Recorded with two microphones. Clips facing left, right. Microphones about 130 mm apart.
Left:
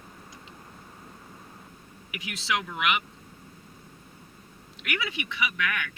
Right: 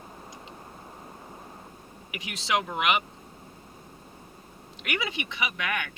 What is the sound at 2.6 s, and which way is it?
Speech, 40° right (ahead or behind).